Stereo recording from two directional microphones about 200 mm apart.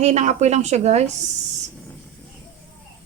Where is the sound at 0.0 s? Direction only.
35° right (ahead or behind).